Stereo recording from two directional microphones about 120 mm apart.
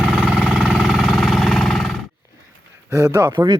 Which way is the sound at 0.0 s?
5° right (ahead or behind).